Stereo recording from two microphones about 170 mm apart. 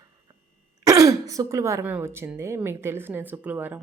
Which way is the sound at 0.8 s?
20° right (ahead or behind).